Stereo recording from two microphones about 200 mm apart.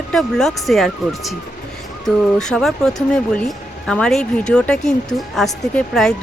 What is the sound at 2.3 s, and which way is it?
Speech, 5° left (ahead or behind).